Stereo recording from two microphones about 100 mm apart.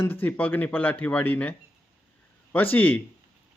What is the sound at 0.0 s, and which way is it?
A man's voice, 20° left (ahead or behind).